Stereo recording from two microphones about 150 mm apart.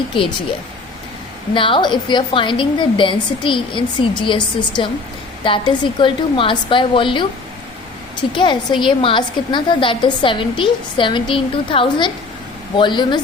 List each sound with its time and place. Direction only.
0.1 s a woman's voice: 35° left (ahead or behind)
1.5 s a woman's voice: 35° left (ahead or behind)
8.3 s a woman's voice: 30° left (ahead or behind)